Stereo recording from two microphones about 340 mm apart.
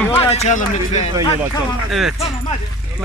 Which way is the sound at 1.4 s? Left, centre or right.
Centre.